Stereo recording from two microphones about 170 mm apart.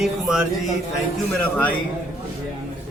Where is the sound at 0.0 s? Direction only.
5° right (ahead or behind).